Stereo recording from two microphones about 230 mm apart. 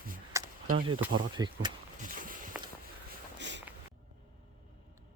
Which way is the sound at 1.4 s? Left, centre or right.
Centre.